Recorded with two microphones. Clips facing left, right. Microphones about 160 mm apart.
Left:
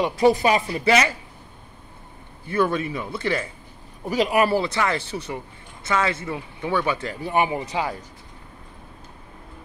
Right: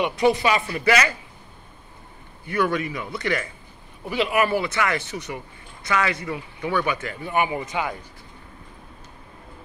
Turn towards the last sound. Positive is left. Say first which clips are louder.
# left 1 dB
turn(degrees=35)  # may be behind; listen again after turning